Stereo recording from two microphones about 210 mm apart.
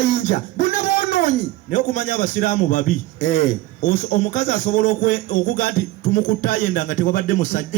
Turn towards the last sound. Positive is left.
turn(degrees=35)  # may be behind; listen again after turning